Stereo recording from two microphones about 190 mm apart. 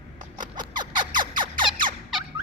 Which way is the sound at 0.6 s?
25° right (ahead or behind).